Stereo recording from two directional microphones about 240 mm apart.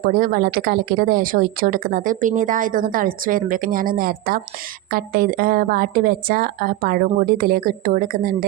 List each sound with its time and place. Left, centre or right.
0.0 s speech: right